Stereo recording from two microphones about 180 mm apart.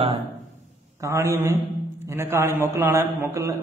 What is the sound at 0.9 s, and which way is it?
A man's voice, 15° right (ahead or behind).